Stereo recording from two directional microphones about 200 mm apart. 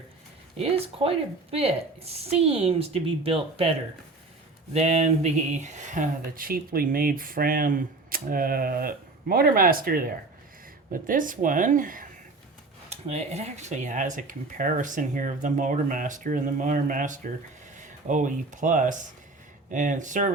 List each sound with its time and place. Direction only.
0.6 s a woman's voice: 30° right (ahead or behind)
4.7 s speech: 30° right (ahead or behind)